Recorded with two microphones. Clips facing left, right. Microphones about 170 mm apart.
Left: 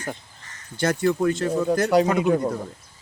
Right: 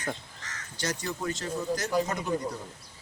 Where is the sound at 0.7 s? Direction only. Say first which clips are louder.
Left 12 dB; 55° left (ahead or behind).